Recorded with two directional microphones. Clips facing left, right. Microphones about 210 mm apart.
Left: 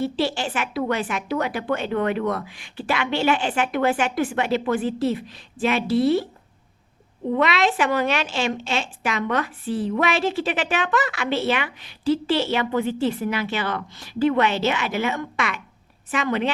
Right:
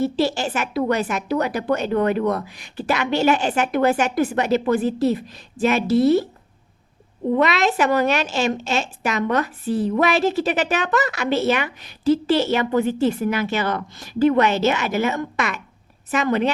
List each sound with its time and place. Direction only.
0.0 s speech: 40° right (ahead or behind)
7.3 s a woman's voice: 40° right (ahead or behind)